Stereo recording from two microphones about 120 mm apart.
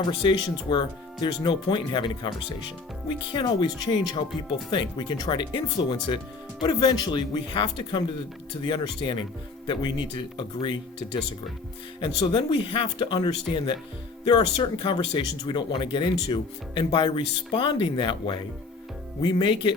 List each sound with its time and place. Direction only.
0.1 s speech: 40° left (ahead or behind)